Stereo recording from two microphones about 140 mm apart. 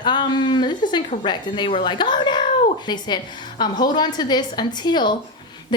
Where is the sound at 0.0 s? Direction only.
35° left (ahead or behind).